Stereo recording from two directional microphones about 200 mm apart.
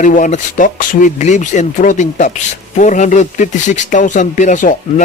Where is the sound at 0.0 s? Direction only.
40° left (ahead or behind).